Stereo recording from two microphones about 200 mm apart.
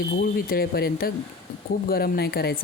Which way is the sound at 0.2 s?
50° left (ahead or behind).